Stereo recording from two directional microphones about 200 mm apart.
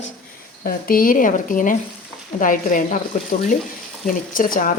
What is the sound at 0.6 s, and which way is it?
Speech, 45° left (ahead or behind).